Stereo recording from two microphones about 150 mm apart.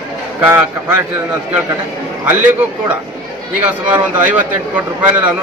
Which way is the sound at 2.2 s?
10° right (ahead or behind).